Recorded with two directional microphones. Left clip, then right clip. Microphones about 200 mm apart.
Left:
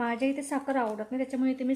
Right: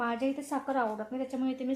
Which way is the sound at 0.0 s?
30° left (ahead or behind).